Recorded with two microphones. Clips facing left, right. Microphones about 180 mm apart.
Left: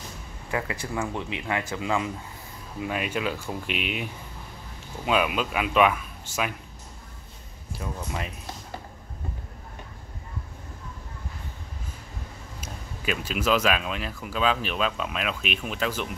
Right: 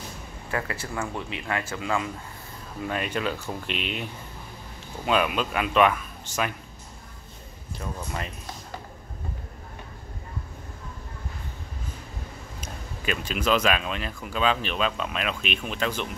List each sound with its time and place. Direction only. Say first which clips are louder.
0.5 s speech: left 1 dB; 15° left (ahead or behind)
2.8 s speech: even; 5° left (ahead or behind)
7.8 s speech: even; 5° left (ahead or behind)
12.5 s speech: even; 5° left (ahead or behind)